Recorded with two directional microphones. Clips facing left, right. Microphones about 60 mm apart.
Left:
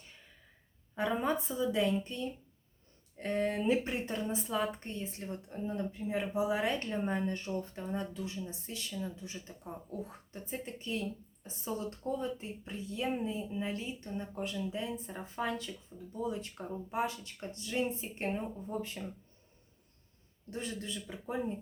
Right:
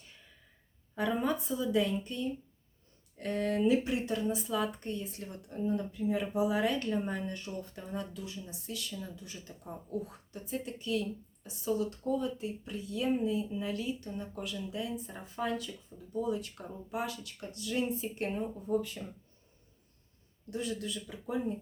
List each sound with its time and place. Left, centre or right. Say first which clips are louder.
0.9 s speech: right 1 dB; left
20.5 s speech: right 3 dB; left